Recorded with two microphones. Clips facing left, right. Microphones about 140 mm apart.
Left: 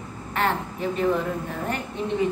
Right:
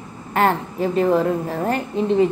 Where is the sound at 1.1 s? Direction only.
35° right (ahead or behind).